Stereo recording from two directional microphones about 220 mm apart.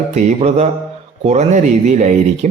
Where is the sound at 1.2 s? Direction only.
30° right (ahead or behind).